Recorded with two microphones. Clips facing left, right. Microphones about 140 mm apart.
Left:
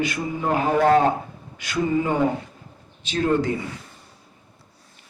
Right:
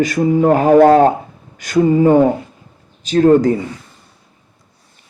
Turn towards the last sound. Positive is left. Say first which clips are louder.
# right 11 dB
turn(degrees=-40)  # may be behind; listen again after turning